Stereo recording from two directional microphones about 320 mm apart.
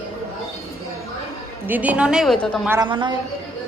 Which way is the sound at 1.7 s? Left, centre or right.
Centre.